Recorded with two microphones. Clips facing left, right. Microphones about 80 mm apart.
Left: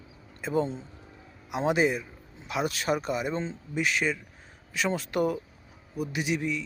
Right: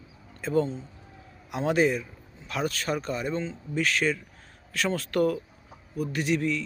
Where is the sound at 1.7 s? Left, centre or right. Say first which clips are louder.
Right 2 dB; centre.